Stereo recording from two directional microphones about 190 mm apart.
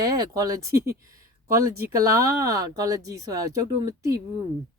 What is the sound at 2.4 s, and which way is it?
Speech, 15° right (ahead or behind).